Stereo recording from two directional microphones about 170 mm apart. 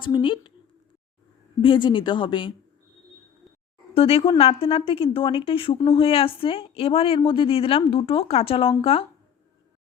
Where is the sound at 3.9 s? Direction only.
35° left (ahead or behind).